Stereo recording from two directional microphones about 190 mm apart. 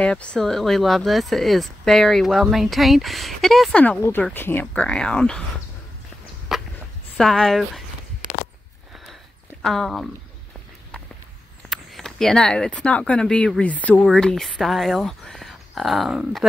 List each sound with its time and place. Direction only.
0.0 s speech: 5° left (ahead or behind)
6.5 s a sound: centre (ahead or behind)
7.2 s speech: centre (ahead or behind)
9.6 s speech: centre (ahead or behind)
11.7 s speech: centre (ahead or behind)